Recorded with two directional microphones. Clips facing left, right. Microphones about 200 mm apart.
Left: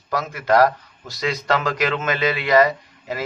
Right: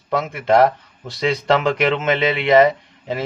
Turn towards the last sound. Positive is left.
turn(degrees=-25)  # may be behind; listen again after turning